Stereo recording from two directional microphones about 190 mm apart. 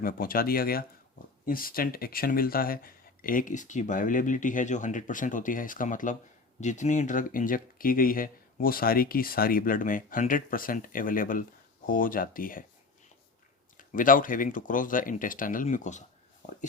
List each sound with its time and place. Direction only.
0.0 s speech: 50° left (ahead or behind)
13.7 s speech: 45° left (ahead or behind)